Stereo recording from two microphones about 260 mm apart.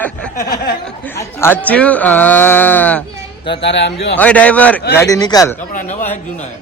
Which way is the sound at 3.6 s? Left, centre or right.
Left.